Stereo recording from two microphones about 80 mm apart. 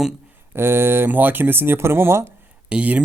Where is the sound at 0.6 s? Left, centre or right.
Right.